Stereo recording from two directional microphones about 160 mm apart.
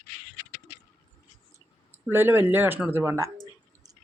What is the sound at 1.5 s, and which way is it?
Speech, 15° right (ahead or behind).